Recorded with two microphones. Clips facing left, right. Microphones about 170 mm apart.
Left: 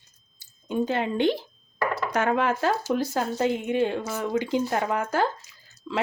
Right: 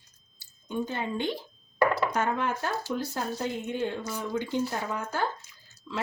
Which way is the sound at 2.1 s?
90° left.